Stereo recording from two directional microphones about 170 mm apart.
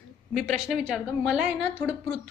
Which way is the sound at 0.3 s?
Centre (ahead or behind).